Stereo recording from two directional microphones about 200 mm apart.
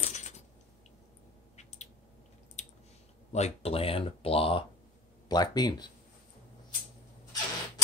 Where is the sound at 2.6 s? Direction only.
35° left (ahead or behind).